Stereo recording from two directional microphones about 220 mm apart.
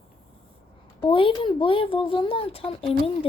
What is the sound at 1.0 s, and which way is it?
Speech, 25° left (ahead or behind).